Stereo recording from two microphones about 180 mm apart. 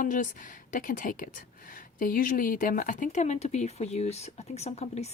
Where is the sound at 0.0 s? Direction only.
45° left (ahead or behind).